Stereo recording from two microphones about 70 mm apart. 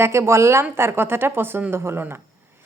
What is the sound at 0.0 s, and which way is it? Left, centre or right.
A woman's voice, right.